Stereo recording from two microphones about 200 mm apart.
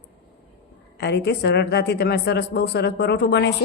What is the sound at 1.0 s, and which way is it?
A woman's voice, 55° left (ahead or behind).